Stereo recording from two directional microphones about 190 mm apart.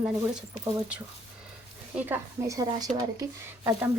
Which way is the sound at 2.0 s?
15° right (ahead or behind).